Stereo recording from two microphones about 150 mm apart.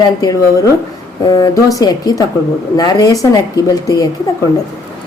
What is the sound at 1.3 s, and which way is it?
Speech, 25° left (ahead or behind).